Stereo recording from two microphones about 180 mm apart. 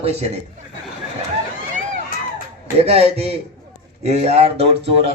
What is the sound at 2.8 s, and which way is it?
A man's voice, 35° right (ahead or behind).